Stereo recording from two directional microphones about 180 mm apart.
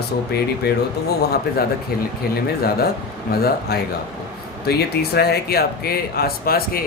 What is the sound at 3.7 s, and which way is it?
Speech, 60° left (ahead or behind).